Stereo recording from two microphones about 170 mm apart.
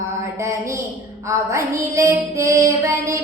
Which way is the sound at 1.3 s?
15° right (ahead or behind).